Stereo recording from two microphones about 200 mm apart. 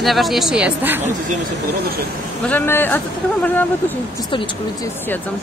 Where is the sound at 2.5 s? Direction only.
10° left (ahead or behind).